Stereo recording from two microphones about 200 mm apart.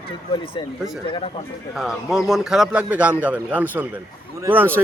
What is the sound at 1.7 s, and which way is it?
A man's voice, centre (ahead or behind).